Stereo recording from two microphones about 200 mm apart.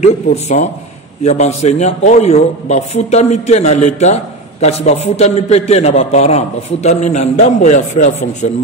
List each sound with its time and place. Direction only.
0.0 s a man's voice: 35° left (ahead or behind)